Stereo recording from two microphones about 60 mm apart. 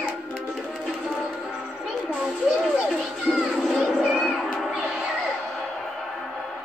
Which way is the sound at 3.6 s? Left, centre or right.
Centre.